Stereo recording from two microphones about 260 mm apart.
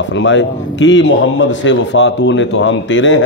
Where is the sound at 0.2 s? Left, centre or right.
Left.